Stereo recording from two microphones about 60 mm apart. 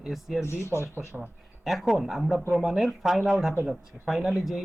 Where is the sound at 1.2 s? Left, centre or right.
Centre.